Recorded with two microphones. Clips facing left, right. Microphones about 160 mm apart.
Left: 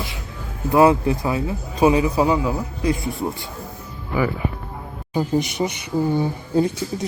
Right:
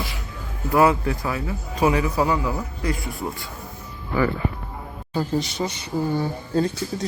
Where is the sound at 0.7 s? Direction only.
20° left (ahead or behind).